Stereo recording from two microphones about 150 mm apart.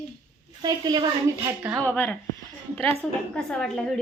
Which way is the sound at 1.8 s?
10° left (ahead or behind).